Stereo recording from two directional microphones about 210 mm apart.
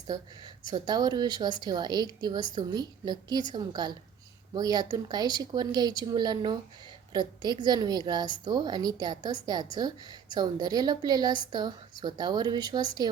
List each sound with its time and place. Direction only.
0.7 s a woman's voice: 20° right (ahead or behind)